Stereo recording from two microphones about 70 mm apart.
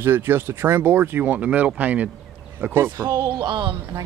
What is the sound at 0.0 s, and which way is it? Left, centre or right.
Speech, right.